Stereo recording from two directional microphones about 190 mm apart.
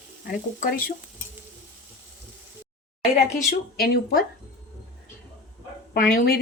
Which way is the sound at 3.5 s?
50° left (ahead or behind).